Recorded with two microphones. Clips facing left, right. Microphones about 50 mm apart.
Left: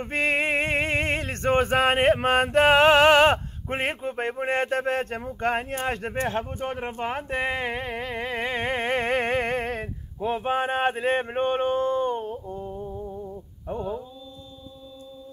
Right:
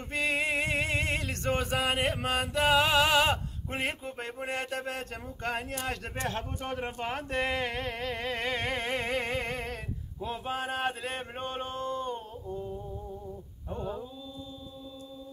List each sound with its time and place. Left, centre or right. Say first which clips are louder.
0.0 s music: left 6 dB; left